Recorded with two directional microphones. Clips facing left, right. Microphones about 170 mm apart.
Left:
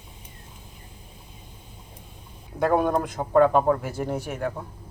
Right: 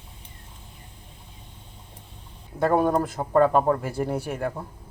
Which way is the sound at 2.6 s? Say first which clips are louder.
Right 1 dB; centre (ahead or behind).